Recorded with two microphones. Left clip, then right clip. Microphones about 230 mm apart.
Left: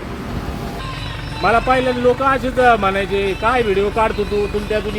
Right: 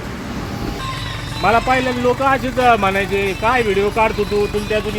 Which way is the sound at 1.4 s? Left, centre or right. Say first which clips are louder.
Even; centre.